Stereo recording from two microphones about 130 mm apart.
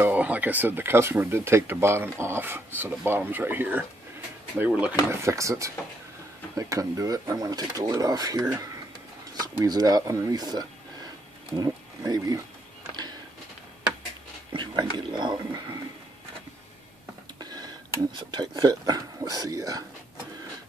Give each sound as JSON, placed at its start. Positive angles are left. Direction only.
{"t": 0.0, "sound": "speech", "side_deg": -10}
{"t": 5.1, "sound": "speech", "side_deg": -20}
{"t": 14.5, "sound": "whispering", "side_deg": -35}
{"t": 17.4, "sound": "a sound", "side_deg": -30}
{"t": 18.1, "sound": "speech", "side_deg": -35}